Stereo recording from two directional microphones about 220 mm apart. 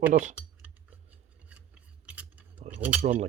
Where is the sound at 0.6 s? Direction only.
5° right (ahead or behind).